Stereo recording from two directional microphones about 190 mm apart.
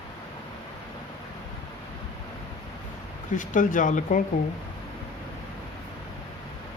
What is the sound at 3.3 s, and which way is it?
Speech, 45° left (ahead or behind).